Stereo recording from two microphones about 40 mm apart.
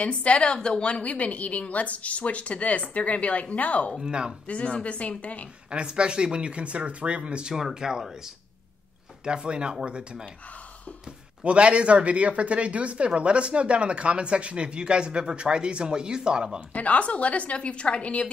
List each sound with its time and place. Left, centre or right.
0.0 s a woman's voice: left
4.0 s speech: centre
4.5 s a woman's voice: left
5.7 s speech: right
7.7 s speech: centre
9.2 s speech: right
16.7 s a woman's voice: left